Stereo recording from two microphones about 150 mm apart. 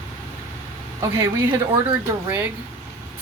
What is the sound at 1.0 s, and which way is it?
Speech, 20° right (ahead or behind).